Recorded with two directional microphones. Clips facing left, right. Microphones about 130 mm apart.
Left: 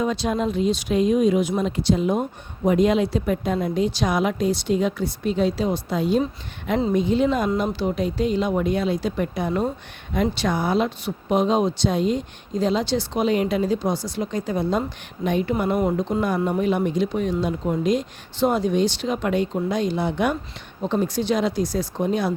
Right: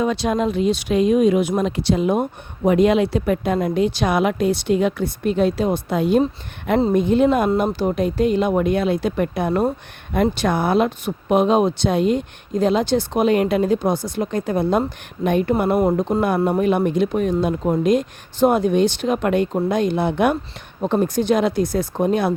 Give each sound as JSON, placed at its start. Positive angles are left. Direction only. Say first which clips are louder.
{"t": 0.0, "sound": "speech", "louder": "right 3 dB", "side_deg": -70}